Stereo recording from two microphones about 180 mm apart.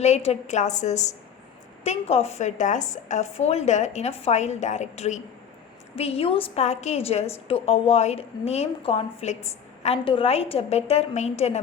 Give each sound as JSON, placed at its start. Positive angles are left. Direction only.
{"t": 0.0, "sound": "a woman's voice", "side_deg": 35}